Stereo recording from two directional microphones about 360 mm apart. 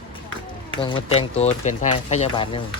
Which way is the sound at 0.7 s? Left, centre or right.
Centre.